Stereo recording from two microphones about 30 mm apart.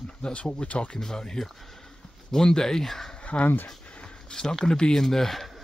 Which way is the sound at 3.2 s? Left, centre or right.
Left.